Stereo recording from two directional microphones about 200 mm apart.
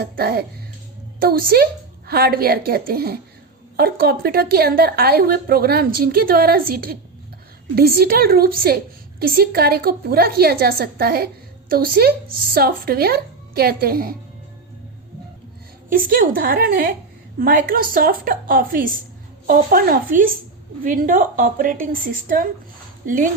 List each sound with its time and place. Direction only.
0.0 s a woman's voice: 50° right (ahead or behind)
15.9 s a woman's voice: 45° right (ahead or behind)